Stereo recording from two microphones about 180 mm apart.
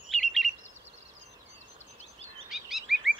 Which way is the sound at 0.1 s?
Centre (ahead or behind).